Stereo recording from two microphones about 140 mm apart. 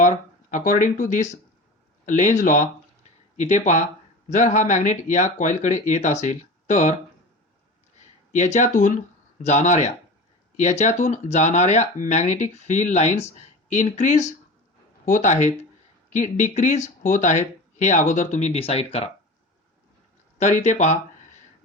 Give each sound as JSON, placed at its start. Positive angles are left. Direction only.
{"t": 0.5, "sound": "speech", "side_deg": 65}
{"t": 8.3, "sound": "speech", "side_deg": 60}
{"t": 20.4, "sound": "speech", "side_deg": 55}